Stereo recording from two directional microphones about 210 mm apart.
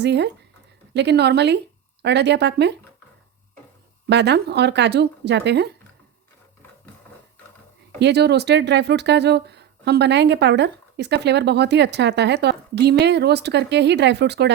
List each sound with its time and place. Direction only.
0.0 s speech: 55° right (ahead or behind)
4.1 s speech: 55° right (ahead or behind)
7.9 s speech: 50° right (ahead or behind)